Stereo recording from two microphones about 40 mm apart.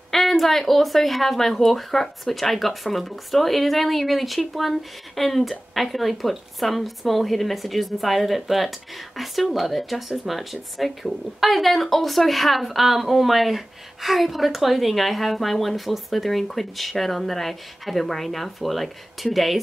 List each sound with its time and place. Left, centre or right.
0.1 s speech: centre